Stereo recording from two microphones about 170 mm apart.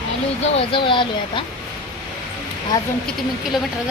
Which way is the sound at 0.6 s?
30° left (ahead or behind).